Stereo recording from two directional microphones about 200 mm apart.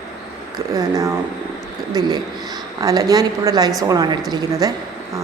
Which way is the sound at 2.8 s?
15° right (ahead or behind).